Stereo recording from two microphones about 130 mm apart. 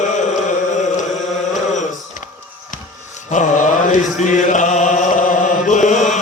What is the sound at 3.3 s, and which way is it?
Chant, 75° left (ahead or behind).